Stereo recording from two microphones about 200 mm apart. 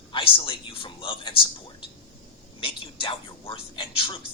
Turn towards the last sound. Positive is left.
turn(degrees=25)  # may be behind; listen again after turning